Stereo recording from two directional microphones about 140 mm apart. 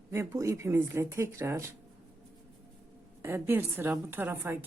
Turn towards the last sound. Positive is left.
turn(degrees=-15)  # may be behind; listen again after turning